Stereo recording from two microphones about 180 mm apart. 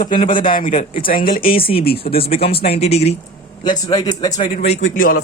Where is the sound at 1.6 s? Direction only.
30° left (ahead or behind).